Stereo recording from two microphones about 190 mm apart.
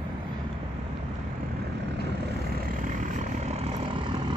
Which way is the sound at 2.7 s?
45° right (ahead or behind).